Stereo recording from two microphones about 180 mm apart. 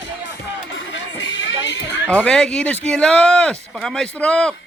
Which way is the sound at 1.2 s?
90° left.